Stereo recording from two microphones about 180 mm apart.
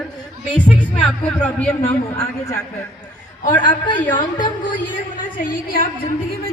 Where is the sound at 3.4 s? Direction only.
25° left (ahead or behind).